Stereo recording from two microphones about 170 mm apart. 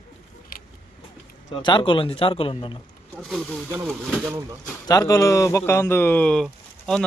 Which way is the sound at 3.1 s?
Centre (ahead or behind).